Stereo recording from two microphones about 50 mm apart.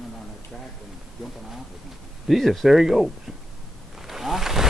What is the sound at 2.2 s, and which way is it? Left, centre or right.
Speech, centre.